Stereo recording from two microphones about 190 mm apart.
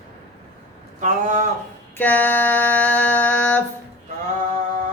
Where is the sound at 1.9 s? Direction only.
10° left (ahead or behind).